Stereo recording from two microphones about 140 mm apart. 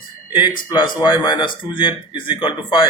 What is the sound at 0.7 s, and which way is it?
Speech, 35° left (ahead or behind).